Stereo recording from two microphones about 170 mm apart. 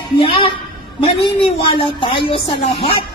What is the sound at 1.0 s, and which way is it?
A woman's voice, 30° left (ahead or behind).